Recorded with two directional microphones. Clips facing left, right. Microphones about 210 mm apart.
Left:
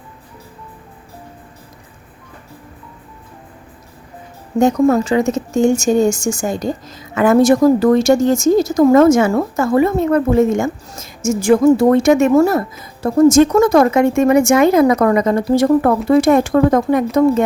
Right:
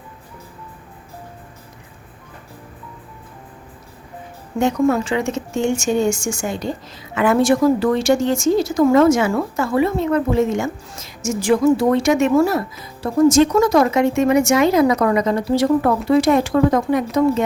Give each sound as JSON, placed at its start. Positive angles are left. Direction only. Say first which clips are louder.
{"t": 4.6, "sound": "a woman's voice", "louder": "left 4 dB", "side_deg": 40}